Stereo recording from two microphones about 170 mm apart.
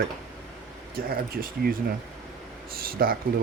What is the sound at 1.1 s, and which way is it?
Speech, 60° right (ahead or behind).